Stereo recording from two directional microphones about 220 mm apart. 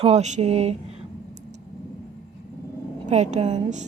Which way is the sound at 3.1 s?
30° right (ahead or behind).